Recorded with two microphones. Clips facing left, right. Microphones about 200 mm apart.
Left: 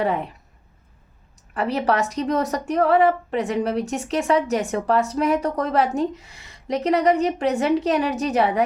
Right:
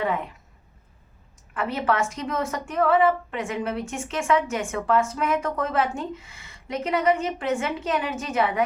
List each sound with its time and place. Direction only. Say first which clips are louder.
0.0 s speech: left 3 dB; 35° left (ahead or behind)
1.5 s a woman's voice: left 3 dB; 40° left (ahead or behind)